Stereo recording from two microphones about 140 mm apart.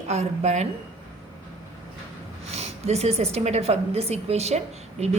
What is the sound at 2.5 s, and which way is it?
A woman's voice, 50° right (ahead or behind).